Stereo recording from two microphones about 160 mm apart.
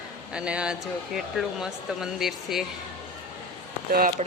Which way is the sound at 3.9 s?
65° right (ahead or behind).